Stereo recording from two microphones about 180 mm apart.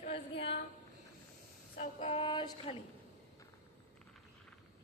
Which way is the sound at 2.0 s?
30° left (ahead or behind).